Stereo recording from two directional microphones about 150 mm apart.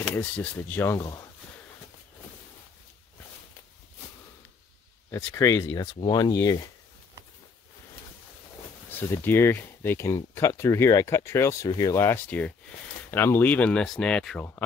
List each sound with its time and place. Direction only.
0.0 s speech: 10° left (ahead or behind)
5.1 s speech: 20° left (ahead or behind)
8.9 s speech: 15° left (ahead or behind)